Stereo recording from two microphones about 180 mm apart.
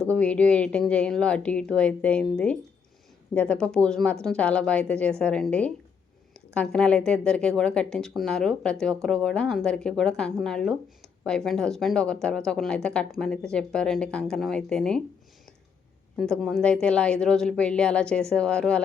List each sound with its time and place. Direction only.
0.1 s a woman's voice: 5° left (ahead or behind)
16.1 s a woman's voice: centre (ahead or behind)